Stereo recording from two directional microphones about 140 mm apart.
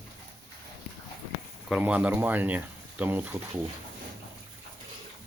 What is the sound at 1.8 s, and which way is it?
Speech, 10° right (ahead or behind).